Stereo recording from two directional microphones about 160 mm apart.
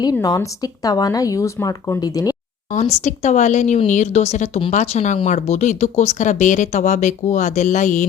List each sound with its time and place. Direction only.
0.0 s speech: 25° left (ahead or behind)
2.7 s speech: 45° left (ahead or behind)